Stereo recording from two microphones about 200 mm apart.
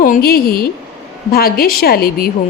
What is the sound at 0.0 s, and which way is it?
A woman's voice, 45° left (ahead or behind).